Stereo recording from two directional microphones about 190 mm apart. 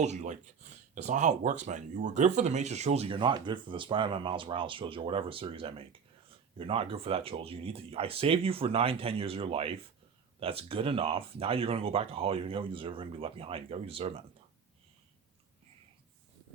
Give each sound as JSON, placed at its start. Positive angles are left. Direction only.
{"t": 0.0, "sound": "speech", "side_deg": -35}